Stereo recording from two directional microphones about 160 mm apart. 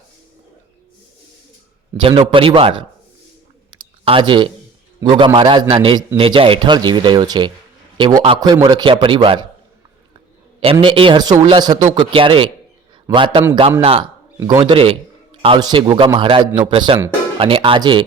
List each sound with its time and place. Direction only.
2.0 s a man's voice: 35° right (ahead or behind)
3.8 s a sound: 30° right (ahead or behind)
4.9 s a man's voice: 30° right (ahead or behind)
10.6 s a man's voice: 35° right (ahead or behind)